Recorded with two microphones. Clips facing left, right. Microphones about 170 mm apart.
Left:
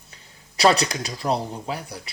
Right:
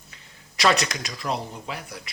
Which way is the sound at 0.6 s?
35° left (ahead or behind).